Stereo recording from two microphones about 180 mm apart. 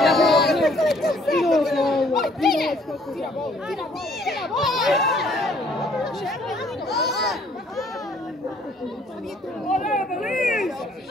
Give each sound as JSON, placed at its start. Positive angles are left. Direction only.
{"t": 0.0, "sound": "chatter", "side_deg": 0}
{"t": 4.2, "sound": "speech", "side_deg": 0}
{"t": 9.7, "sound": "speech", "side_deg": 45}
{"t": 10.2, "sound": "speech", "side_deg": 0}